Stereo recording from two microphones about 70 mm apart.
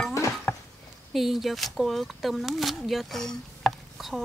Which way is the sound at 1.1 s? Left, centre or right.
Centre.